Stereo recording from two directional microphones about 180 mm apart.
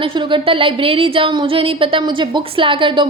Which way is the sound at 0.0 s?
25° right (ahead or behind).